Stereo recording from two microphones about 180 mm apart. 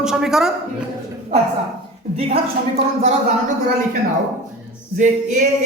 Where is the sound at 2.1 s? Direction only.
35° right (ahead or behind).